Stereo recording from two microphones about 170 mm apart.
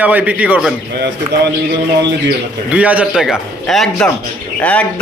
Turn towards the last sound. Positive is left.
turn(degrees=10)  # may be behind; listen again after turning